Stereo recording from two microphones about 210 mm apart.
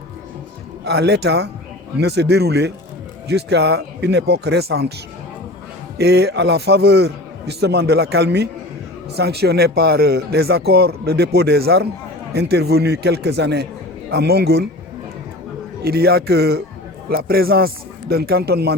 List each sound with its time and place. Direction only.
0.9 s speech: 50° right (ahead or behind)
6.0 s speech: 50° right (ahead or behind)
15.8 s speech: 50° right (ahead or behind)